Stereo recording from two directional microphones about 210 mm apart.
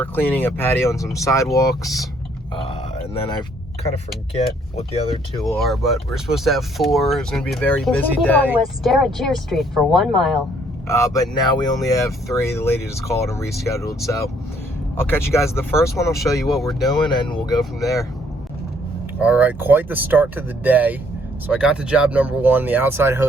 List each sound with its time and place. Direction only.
0.0 s speech: 10° left (ahead or behind)
5.5 s speech: centre (ahead or behind)
10.8 s speech: 15° left (ahead or behind)
14.9 s speech: 10° left (ahead or behind)
16.1 s speech: centre (ahead or behind)
16.9 s speech: 20° left (ahead or behind)
17.6 s speech: centre (ahead or behind)
19.2 s speech: 5° right (ahead or behind)